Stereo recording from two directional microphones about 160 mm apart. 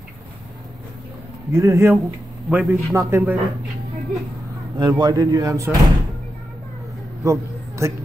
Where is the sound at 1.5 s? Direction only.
15° right (ahead or behind).